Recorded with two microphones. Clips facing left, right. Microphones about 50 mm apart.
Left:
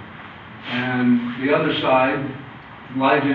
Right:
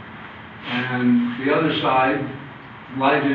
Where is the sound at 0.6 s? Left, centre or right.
Centre.